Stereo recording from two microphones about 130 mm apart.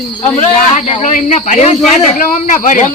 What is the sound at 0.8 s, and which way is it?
Speech, 60° left (ahead or behind).